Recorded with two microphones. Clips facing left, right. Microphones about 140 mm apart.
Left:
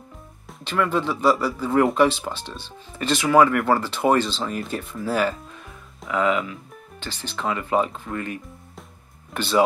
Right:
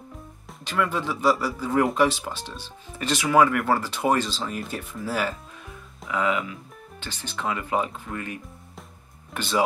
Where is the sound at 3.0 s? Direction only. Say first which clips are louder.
Left 3 dB; 20° left (ahead or behind).